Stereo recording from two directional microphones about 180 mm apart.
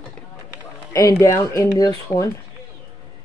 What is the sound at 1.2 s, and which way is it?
Speech, 15° left (ahead or behind).